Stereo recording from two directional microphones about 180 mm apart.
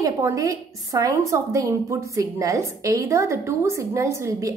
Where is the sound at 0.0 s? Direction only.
20° right (ahead or behind).